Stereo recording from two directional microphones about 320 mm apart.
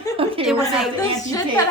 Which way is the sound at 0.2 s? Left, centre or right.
Centre.